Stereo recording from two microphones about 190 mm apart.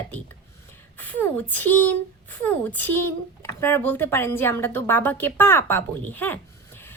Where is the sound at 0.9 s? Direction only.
10° left (ahead or behind).